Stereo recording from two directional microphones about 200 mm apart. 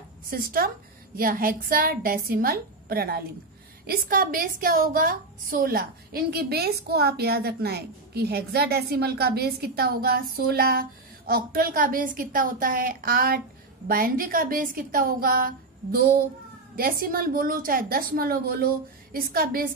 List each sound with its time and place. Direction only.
0.3 s a woman's voice: 45° right (ahead or behind)